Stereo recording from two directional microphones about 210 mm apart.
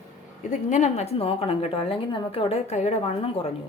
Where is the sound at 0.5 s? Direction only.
35° left (ahead or behind).